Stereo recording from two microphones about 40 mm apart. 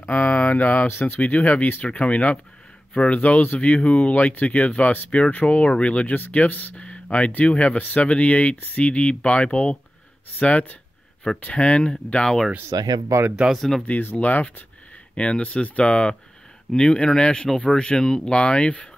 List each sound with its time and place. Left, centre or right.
0.1 s speech: left
0.8 s speech: left
1.1 s speech: left
6.1 s speech: left
6.8 s speech: left
10.4 s speech: left
13.6 s speech: centre
14.1 s speech: left